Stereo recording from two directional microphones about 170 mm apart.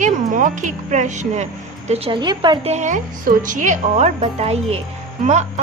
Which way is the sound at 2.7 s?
45° right (ahead or behind).